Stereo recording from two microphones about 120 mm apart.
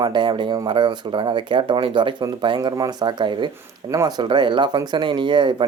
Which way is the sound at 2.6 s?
30° right (ahead or behind).